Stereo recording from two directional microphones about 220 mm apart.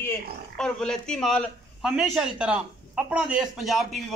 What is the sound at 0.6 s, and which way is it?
A man's voice, 5° left (ahead or behind).